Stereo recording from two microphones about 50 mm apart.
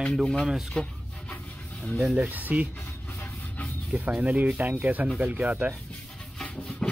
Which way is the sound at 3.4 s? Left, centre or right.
Left.